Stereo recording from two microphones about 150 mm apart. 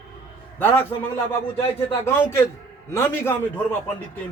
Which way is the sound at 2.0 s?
15° left (ahead or behind).